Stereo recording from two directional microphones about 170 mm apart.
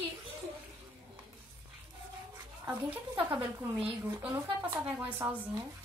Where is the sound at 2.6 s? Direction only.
10° right (ahead or behind).